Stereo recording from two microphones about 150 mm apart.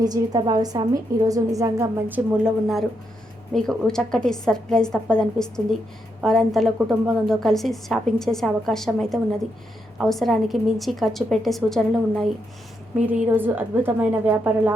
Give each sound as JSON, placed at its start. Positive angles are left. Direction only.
{"t": 0.0, "sound": "a woman's voice", "side_deg": -25}
{"t": 3.5, "sound": "a woman's voice", "side_deg": 5}
{"t": 13.0, "sound": "a woman's voice", "side_deg": -10}